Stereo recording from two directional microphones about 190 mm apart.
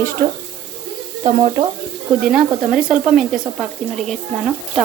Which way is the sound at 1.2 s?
30° right (ahead or behind).